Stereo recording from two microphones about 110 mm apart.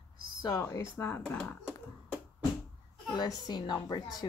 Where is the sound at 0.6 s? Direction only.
25° left (ahead or behind).